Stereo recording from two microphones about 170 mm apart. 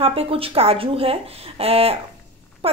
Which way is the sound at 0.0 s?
35° right (ahead or behind).